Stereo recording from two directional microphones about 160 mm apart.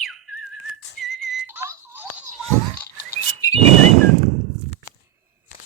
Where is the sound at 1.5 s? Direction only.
15° right (ahead or behind).